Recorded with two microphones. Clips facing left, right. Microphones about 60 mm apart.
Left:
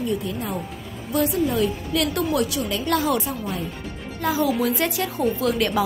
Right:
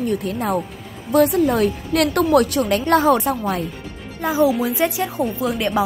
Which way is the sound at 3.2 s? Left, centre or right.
Right.